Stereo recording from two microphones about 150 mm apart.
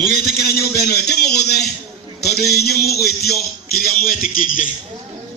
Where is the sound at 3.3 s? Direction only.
80° left.